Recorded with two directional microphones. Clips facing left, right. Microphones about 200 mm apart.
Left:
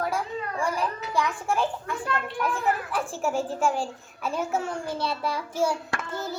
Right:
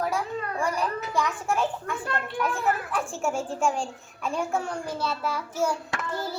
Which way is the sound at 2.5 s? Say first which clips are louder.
Left 1 dB; centre (ahead or behind).